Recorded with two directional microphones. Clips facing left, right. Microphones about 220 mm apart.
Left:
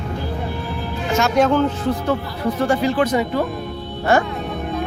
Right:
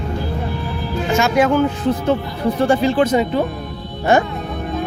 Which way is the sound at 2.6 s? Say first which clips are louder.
Right 3 dB; 25° right (ahead or behind).